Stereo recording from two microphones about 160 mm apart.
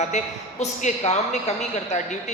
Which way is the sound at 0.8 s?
45° left (ahead or behind).